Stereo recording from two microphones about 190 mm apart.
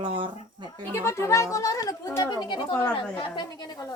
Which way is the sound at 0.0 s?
25° right (ahead or behind).